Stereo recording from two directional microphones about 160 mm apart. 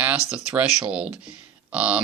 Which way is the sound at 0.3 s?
5° right (ahead or behind).